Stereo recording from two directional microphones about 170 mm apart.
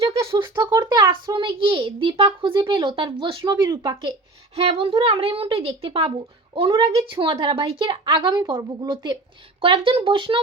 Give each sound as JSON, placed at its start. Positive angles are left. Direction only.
{"t": 0.0, "sound": "a sound", "side_deg": -35}
{"t": 0.4, "sound": "a child's voice", "side_deg": -25}
{"t": 4.5, "sound": "a woman's voice", "side_deg": -35}